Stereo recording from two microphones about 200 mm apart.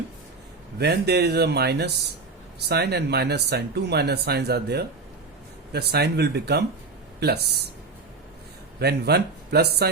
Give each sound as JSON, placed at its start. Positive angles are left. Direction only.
{"t": 0.8, "sound": "speech", "side_deg": -55}
{"t": 8.8, "sound": "speech", "side_deg": -55}